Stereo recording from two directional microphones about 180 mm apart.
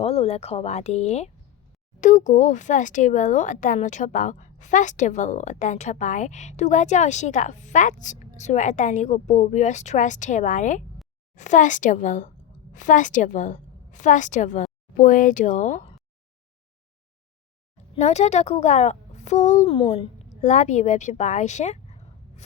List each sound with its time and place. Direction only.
0.0 s a woman's voice: 35° left (ahead or behind)
17.9 s a woman's voice: 40° left (ahead or behind)